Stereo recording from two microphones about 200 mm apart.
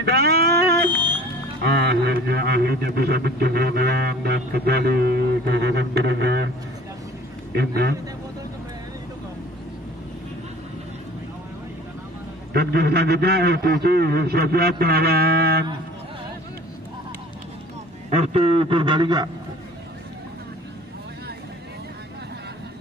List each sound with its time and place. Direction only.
0.0 s a sound: 55° right (ahead or behind)
1.6 s speech: 55° right (ahead or behind)
7.5 s a man's voice: 55° right (ahead or behind)
12.5 s speech: 55° right (ahead or behind)
18.1 s a man's voice: 30° right (ahead or behind)